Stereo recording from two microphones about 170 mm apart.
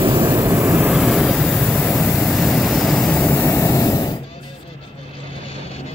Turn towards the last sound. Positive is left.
turn(degrees=20)  # may be behind; listen again after turning